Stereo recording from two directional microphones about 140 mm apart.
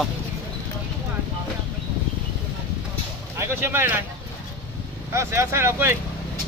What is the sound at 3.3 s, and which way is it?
Speech, 15° right (ahead or behind).